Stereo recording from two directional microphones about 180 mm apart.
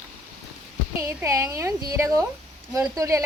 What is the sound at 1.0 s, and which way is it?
A woman's voice, 15° right (ahead or behind).